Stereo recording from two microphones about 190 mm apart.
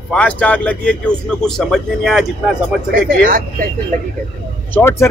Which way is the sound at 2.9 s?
45° right (ahead or behind).